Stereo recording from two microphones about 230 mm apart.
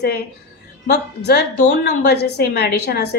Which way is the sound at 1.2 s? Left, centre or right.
Left.